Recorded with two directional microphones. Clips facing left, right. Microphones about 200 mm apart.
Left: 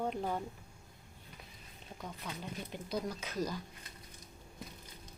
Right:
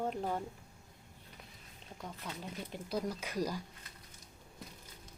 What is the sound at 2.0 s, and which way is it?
Speech, centre (ahead or behind).